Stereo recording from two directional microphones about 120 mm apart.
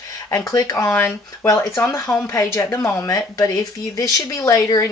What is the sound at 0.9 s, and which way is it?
Speech, 15° left (ahead or behind).